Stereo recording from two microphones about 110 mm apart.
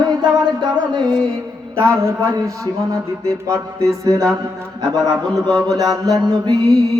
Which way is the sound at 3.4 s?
30° right (ahead or behind).